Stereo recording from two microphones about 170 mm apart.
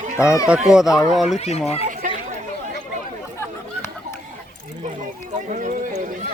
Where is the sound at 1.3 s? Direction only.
40° left (ahead or behind).